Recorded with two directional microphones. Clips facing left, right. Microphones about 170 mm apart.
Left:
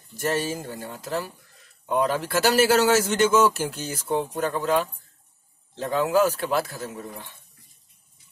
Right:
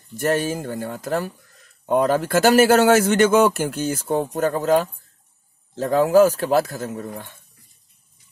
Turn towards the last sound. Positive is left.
turn(degrees=-50)  # may be behind; listen again after turning